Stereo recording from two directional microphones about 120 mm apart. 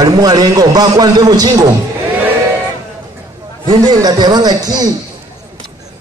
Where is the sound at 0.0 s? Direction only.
35° right (ahead or behind).